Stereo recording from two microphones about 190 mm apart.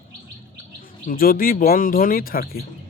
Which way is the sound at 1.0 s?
50° left (ahead or behind).